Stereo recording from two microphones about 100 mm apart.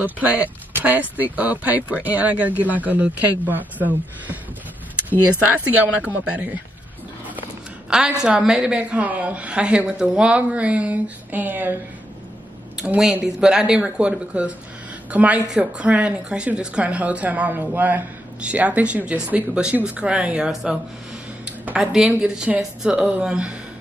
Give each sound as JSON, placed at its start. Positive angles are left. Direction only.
{"t": 0.0, "sound": "speech", "side_deg": -15}
{"t": 5.7, "sound": "speech", "side_deg": -15}
{"t": 8.2, "sound": "speech", "side_deg": -10}
{"t": 12.7, "sound": "speech", "side_deg": -5}